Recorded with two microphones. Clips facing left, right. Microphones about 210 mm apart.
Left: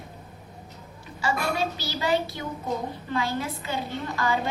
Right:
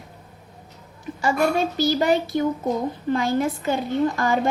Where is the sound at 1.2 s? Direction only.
50° right (ahead or behind).